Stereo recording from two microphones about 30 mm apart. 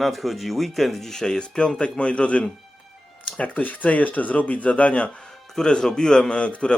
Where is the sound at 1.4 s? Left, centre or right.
Left.